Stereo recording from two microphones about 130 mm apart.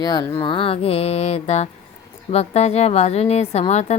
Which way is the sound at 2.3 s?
55° left (ahead or behind).